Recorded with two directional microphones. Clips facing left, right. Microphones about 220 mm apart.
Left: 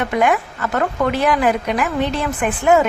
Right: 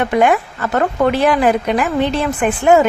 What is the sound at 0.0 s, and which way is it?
Speech, 30° right (ahead or behind).